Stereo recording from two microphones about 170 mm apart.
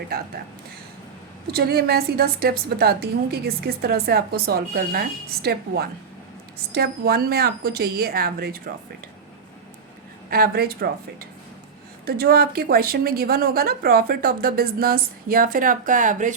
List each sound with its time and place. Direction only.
1.5 s a woman's voice: 65° right (ahead or behind)
10.2 s a woman's voice: 60° right (ahead or behind)
12.0 s a woman's voice: 65° right (ahead or behind)